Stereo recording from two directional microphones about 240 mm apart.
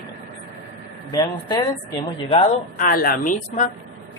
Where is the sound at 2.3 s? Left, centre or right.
Left.